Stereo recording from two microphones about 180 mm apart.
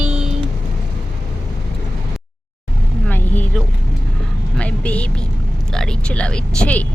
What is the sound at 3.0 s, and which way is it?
Vehicle, 10° left (ahead or behind).